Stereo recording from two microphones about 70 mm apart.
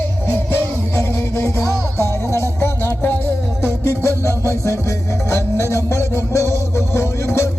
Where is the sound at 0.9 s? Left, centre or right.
Left.